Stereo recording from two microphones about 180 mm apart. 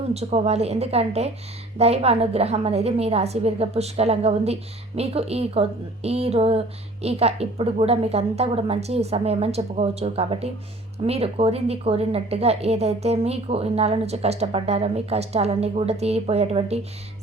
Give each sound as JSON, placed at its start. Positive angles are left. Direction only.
{"t": 0.1, "sound": "a woman's voice", "side_deg": -35}